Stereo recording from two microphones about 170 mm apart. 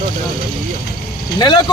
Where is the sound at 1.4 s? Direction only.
25° left (ahead or behind).